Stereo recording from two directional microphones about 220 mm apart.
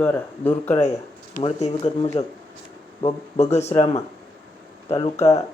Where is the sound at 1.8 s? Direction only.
20° left (ahead or behind).